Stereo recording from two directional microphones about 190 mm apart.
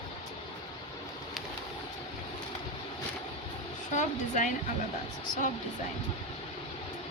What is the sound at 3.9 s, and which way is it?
Speech, 40° left (ahead or behind).